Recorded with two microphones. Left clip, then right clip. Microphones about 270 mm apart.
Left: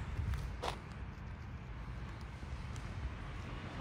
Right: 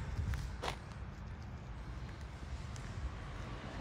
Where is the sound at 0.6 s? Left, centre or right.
Centre.